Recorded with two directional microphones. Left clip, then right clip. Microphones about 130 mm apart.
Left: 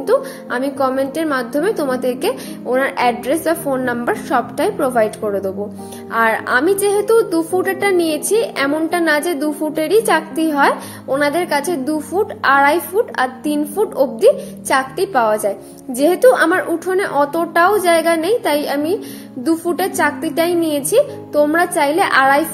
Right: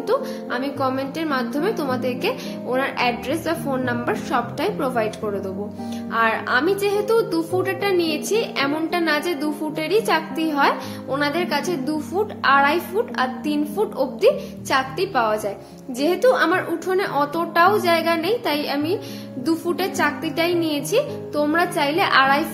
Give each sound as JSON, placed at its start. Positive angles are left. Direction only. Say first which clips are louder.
{"t": 0.0, "sound": "a woman's voice", "louder": "left 6 dB", "side_deg": 35}
{"t": 9.8, "sound": "a woman's voice", "louder": "left 5 dB", "side_deg": 40}